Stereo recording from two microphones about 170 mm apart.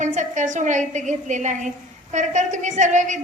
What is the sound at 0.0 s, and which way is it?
A woman's voice, 45° right (ahead or behind).